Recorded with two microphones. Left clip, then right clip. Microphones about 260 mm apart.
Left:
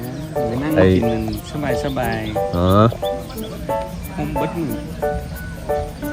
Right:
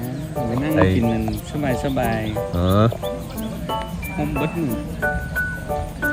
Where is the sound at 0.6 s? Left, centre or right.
Centre.